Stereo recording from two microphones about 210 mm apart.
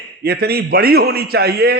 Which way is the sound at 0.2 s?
50° right (ahead or behind).